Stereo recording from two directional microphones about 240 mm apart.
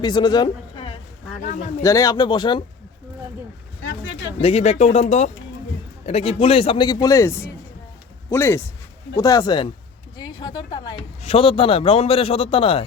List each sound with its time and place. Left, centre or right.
0.0 s speech: centre
4.4 s speech: left